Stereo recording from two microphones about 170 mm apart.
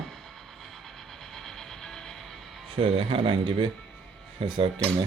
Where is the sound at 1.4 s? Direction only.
Centre (ahead or behind).